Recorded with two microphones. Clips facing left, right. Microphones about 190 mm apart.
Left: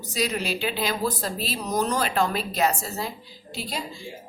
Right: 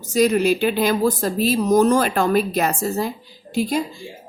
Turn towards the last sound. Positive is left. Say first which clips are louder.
# right 12 dB
turn(degrees=-50)  # may be behind; listen again after turning